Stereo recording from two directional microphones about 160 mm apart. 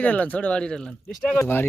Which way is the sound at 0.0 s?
10° left (ahead or behind).